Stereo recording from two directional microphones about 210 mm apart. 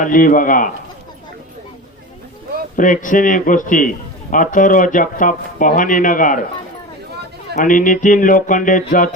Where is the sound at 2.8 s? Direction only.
40° left (ahead or behind).